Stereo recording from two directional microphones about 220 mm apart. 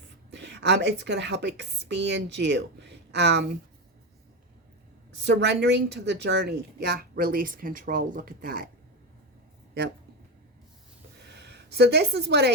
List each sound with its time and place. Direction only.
0.3 s a woman's voice: 50° right (ahead or behind)
5.2 s a woman's voice: 50° right (ahead or behind)
11.3 s speech: 50° right (ahead or behind)